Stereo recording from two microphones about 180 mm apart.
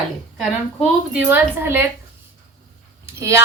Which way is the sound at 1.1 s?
10° right (ahead or behind).